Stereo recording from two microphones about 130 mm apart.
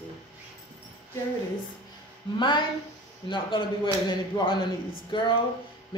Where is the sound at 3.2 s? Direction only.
40° left (ahead or behind).